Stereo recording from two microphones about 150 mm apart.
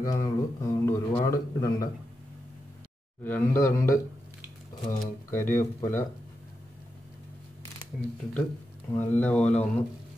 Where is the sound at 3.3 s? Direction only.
15° left (ahead or behind).